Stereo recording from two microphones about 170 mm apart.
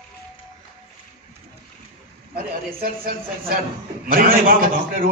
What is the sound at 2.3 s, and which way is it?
A man's voice, 60° right (ahead or behind).